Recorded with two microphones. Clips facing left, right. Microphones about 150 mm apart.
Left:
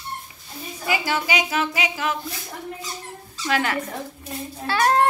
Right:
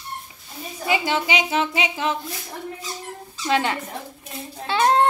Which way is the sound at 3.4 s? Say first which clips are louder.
Right 1 dB; 25° right (ahead or behind).